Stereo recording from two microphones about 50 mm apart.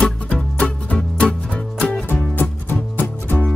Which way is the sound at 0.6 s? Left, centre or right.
Left.